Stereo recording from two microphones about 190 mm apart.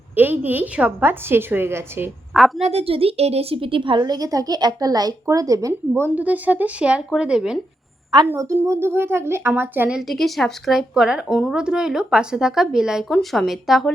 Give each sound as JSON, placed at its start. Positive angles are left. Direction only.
{"t": 0.2, "sound": "a woman's voice", "side_deg": -10}
{"t": 2.6, "sound": "speech", "side_deg": -35}
{"t": 8.3, "sound": "speech", "side_deg": -15}